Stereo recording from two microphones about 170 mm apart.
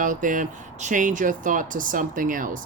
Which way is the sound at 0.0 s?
50° right (ahead or behind).